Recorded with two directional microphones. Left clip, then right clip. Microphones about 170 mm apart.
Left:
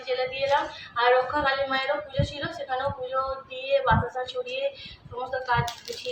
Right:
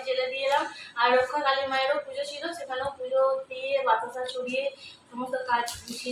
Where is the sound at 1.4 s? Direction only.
10° left (ahead or behind).